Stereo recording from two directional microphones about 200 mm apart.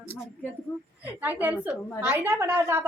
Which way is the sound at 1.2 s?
10° right (ahead or behind).